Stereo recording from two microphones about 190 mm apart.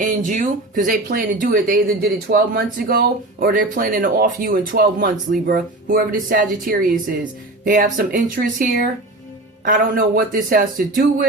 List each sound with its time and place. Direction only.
0.0 s speech: 45° right (ahead or behind)
9.6 s speech: 45° right (ahead or behind)